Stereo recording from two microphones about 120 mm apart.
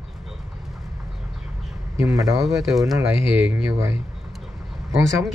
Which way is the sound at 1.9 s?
25° right (ahead or behind).